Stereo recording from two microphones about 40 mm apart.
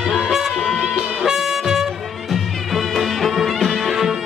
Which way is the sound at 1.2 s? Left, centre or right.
Centre.